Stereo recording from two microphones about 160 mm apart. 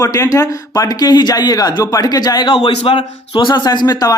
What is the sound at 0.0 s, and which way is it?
Speech, 20° left (ahead or behind).